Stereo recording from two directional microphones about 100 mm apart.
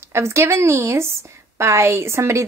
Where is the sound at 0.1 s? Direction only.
25° right (ahead or behind).